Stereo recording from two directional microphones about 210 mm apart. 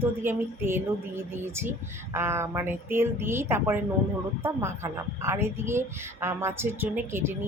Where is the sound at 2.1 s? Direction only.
10° right (ahead or behind).